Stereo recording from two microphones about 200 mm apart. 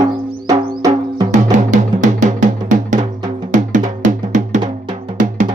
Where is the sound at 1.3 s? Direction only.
35° right (ahead or behind).